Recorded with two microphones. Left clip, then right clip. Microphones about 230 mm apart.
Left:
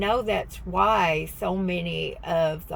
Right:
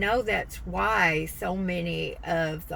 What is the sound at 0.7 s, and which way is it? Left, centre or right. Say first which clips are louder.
Speech: left 3 dB; centre.